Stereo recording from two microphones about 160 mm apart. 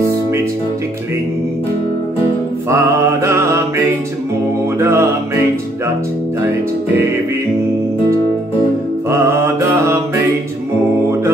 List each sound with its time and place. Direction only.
2.7 s mantra: 15° right (ahead or behind)
4.7 s music: 15° right (ahead or behind)
9.1 s mantra: 15° right (ahead or behind)